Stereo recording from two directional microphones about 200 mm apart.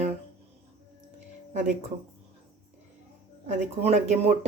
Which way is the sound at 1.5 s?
35° right (ahead or behind).